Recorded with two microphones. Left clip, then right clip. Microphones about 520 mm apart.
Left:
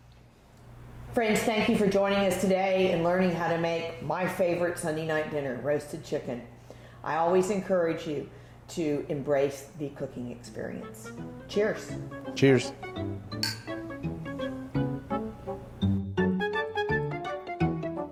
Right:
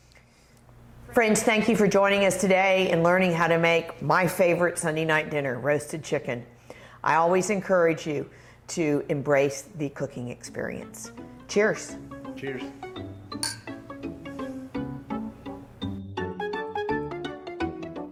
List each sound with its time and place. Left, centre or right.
1.1 s a woman's voice: right
12.4 s speech: left
12.8 s music: centre